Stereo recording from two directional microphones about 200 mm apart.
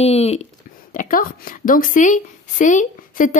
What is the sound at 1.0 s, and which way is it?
Speech, 45° left (ahead or behind).